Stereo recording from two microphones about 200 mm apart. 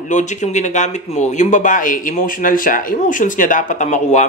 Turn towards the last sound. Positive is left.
turn(degrees=35)  # may be behind; listen again after turning